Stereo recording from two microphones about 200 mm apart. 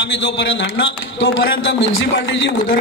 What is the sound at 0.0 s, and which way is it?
A man's voice, 65° left (ahead or behind).